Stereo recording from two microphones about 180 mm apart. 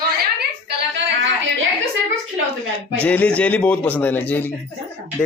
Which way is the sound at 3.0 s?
10° left (ahead or behind).